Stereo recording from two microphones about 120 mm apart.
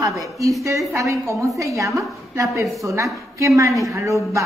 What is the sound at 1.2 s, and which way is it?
Music, 25° right (ahead or behind).